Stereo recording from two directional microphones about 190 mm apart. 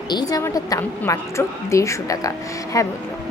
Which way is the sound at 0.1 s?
20° left (ahead or behind).